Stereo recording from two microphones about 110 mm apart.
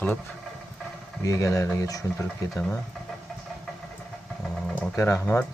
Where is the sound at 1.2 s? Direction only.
30° left (ahead or behind).